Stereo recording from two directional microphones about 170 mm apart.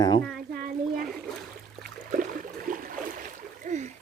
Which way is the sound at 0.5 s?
60° right (ahead or behind).